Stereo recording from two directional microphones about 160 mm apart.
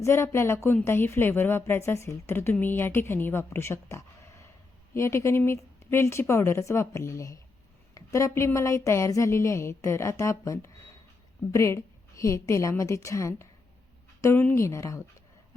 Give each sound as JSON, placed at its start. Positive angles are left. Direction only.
{"t": 0.0, "sound": "a woman's voice", "side_deg": 15}